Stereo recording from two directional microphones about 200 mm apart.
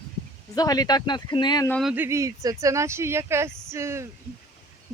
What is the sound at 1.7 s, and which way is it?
Speech, 5° left (ahead or behind).